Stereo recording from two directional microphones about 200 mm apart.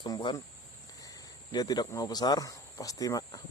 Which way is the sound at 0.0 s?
25° left (ahead or behind).